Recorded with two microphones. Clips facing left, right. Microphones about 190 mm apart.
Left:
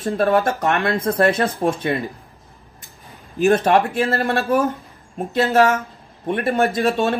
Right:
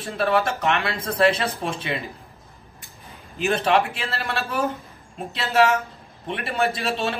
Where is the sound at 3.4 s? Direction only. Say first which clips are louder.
Left 6 dB; 50° left (ahead or behind).